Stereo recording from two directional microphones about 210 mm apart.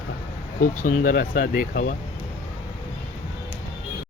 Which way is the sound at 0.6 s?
40° left (ahead or behind).